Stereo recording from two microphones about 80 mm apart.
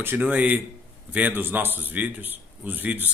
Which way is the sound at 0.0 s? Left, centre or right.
Right.